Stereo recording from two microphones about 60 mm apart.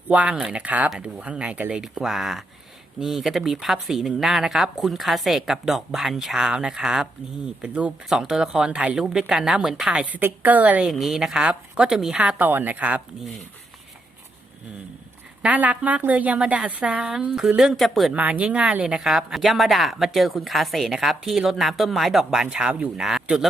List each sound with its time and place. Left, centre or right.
0.1 s a woman's voice: centre
1.7 s speech: centre
7.6 s a woman's voice: right
8.1 s speech: centre
10.0 s a woman's voice: right
10.8 s speech: centre
12.4 s a woman's voice: right
15.4 s a woman's voice: right; by 18.1 s centre
18.1 s a woman's voice: right
18.9 s speech: centre
23.0 s speech: centre